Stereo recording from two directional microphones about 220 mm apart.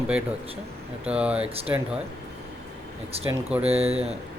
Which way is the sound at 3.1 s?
25° right (ahead or behind).